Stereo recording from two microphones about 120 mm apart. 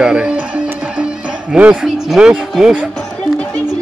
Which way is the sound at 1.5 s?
10° right (ahead or behind).